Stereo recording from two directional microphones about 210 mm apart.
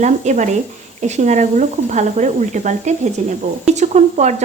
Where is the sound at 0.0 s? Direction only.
35° right (ahead or behind).